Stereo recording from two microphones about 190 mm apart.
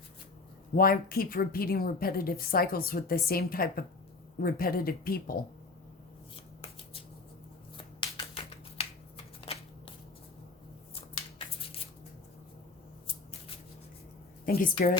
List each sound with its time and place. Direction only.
0.8 s a woman's voice: 50° left (ahead or behind)
6.3 s shuffling cards: 30° left (ahead or behind)
14.4 s a woman's voice: 45° left (ahead or behind)